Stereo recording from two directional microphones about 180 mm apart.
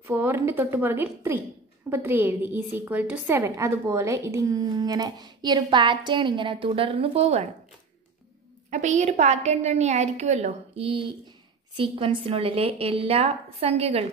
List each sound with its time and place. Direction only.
0.0 s a woman's voice: 10° right (ahead or behind); by 7.4 s 35° right (ahead or behind)
8.6 s a woman's voice: 40° right (ahead or behind)